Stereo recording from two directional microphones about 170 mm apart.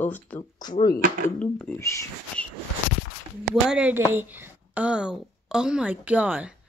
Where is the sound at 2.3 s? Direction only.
10° left (ahead or behind).